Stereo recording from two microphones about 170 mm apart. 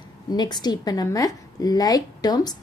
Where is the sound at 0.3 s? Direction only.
25° left (ahead or behind).